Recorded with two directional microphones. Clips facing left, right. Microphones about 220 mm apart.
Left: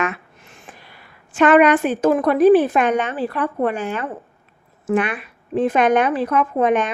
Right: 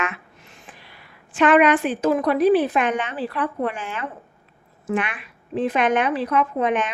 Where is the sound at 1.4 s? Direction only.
45° left (ahead or behind).